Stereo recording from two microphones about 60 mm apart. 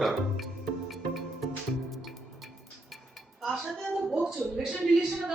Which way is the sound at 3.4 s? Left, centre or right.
Centre.